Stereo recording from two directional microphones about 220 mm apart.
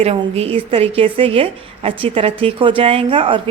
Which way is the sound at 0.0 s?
25° right (ahead or behind).